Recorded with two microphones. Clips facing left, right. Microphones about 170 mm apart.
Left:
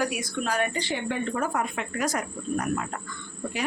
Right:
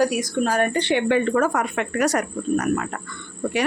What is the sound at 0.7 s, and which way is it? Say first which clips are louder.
Speech: right 9 dB; 70° right (ahead or behind).